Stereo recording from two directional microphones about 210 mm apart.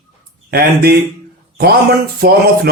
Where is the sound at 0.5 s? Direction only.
45° right (ahead or behind).